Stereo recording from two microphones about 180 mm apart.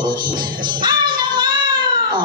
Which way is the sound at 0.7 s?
25° right (ahead or behind).